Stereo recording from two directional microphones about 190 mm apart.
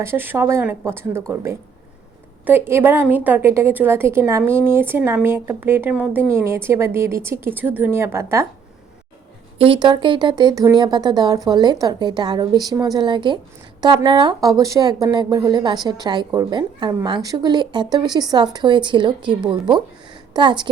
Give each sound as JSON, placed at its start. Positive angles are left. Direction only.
{"t": 0.0, "sound": "a woman's voice", "side_deg": -10}
{"t": 9.6, "sound": "a woman's voice", "side_deg": -25}